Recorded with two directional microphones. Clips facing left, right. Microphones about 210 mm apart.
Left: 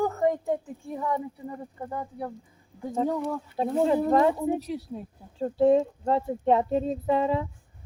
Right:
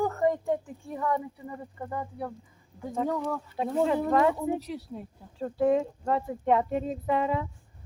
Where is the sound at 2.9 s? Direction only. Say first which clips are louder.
Left 2 dB; 25° left (ahead or behind).